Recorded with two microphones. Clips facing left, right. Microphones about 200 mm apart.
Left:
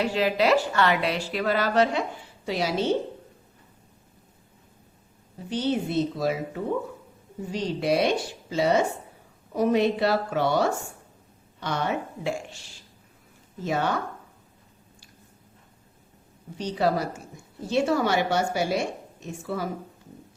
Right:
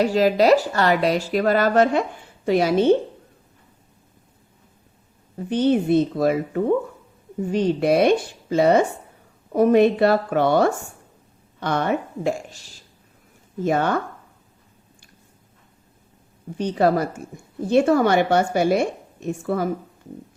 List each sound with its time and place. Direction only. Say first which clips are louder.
0.0 s a woman's voice: right 6 dB; 40° right (ahead or behind)
5.5 s a woman's voice: right 8 dB; 55° right (ahead or behind)
13.7 s a woman's voice: right 5 dB; 50° right (ahead or behind)
16.6 s a woman's voice: right 6 dB; 55° right (ahead or behind)